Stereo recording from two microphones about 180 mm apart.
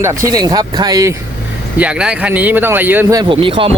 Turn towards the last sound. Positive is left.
turn(degrees=-30)  # may be behind; listen again after turning